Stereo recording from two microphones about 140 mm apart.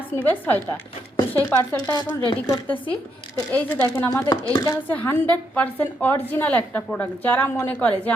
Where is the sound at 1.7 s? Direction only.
30° left (ahead or behind).